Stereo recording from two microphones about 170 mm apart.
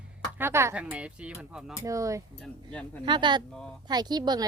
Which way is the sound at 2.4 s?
5° left (ahead or behind).